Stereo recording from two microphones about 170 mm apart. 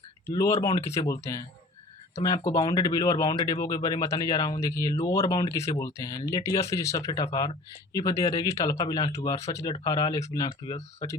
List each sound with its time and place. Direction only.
0.3 s speech: 15° left (ahead or behind)